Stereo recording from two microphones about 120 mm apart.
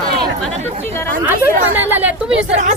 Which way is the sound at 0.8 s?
20° left (ahead or behind).